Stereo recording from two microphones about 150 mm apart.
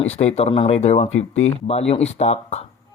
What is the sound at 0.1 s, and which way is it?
Speech, 45° left (ahead or behind).